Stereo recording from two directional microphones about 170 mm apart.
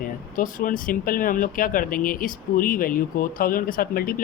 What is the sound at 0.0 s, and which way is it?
Speech, 50° left (ahead or behind).